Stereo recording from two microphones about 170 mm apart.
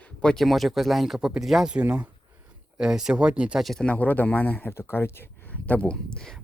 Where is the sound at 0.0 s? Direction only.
5° left (ahead or behind).